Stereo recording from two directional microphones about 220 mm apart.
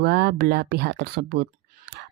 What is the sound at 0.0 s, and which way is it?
Speech, 50° right (ahead or behind).